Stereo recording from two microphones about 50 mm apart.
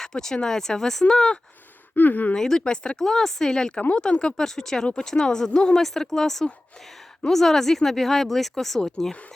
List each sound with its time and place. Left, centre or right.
0.0 s speech: centre
2.0 s speech: left
2.3 s speech: centre